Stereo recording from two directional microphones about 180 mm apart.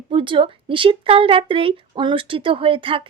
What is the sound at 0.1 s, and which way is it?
A woman's voice, 30° right (ahead or behind).